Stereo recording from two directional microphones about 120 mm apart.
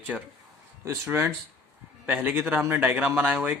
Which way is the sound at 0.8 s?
20° right (ahead or behind).